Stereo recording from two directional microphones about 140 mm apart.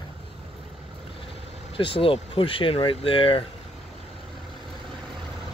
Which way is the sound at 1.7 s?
40° left (ahead or behind).